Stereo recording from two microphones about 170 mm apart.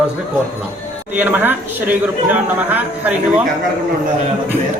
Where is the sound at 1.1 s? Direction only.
10° right (ahead or behind).